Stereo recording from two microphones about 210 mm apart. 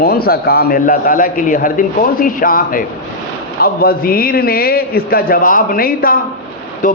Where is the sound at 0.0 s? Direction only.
45° left (ahead or behind).